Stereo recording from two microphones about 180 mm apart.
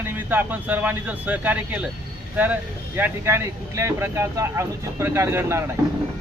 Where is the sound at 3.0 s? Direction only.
10° right (ahead or behind).